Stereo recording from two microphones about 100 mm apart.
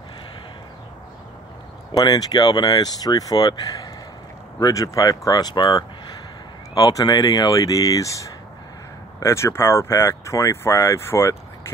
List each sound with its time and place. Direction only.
2.0 s speech: 40° left (ahead or behind)
6.7 s speech: 35° left (ahead or behind)